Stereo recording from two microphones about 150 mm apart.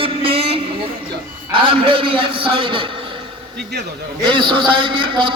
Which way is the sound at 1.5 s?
35° right (ahead or behind).